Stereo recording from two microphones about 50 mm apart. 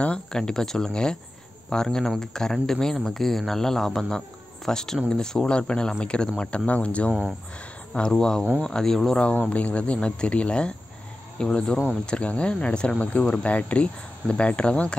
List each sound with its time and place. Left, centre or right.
0.3 s speech: centre
8.1 s speech: centre
9.4 s speech: left